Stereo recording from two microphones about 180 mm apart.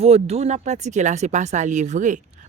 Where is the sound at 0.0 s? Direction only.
35° right (ahead or behind).